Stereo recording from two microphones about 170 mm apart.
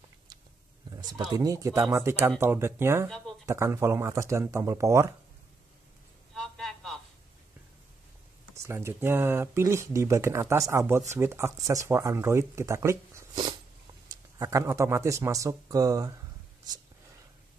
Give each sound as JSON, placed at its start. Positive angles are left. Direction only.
{"t": 1.3, "sound": "speech", "side_deg": -20}
{"t": 6.3, "sound": "a sound", "side_deg": 5}
{"t": 8.5, "sound": "speech", "side_deg": -15}